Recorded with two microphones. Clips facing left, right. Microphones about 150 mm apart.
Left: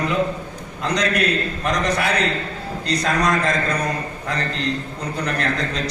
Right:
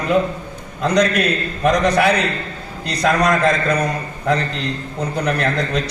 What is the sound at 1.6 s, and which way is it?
A man's voice, 65° right (ahead or behind).